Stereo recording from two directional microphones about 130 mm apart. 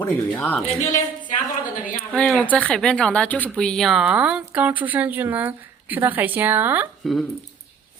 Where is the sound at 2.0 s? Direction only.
5° left (ahead or behind); by 6.8 s 15° right (ahead or behind).